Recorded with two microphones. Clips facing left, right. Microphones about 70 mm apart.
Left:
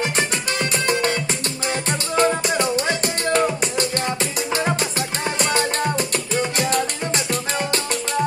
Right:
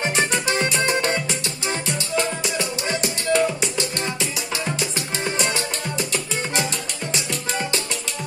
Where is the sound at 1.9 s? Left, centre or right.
Left.